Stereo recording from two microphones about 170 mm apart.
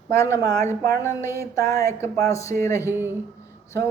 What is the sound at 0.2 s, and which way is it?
Speech, 20° left (ahead or behind).